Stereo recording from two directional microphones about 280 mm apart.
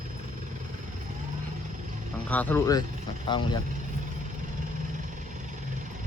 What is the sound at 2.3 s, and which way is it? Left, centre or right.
Speech, centre.